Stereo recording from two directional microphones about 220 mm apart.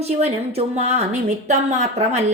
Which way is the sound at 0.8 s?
30° right (ahead or behind).